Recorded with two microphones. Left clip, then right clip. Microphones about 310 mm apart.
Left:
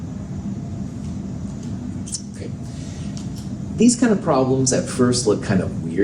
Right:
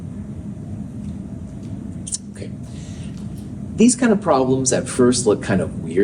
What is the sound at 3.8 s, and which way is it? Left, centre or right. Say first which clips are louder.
Speech: right 1 dB; right.